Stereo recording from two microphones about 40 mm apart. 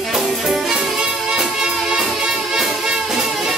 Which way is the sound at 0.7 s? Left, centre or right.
Centre.